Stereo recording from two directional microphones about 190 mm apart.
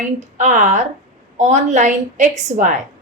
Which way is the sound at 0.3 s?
40° right (ahead or behind).